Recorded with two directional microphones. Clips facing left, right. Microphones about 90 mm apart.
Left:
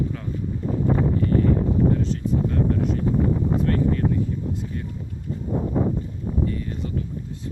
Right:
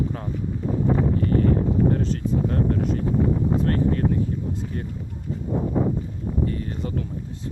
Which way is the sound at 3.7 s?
45° right (ahead or behind).